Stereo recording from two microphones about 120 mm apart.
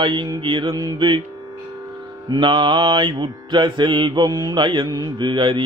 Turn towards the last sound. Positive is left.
turn(degrees=-45)  # may be behind; listen again after turning